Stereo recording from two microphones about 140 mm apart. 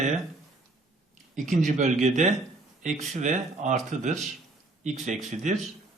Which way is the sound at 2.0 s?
55° right (ahead or behind).